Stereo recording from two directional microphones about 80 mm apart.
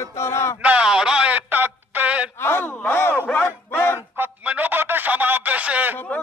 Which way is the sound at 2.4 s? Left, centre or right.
Left.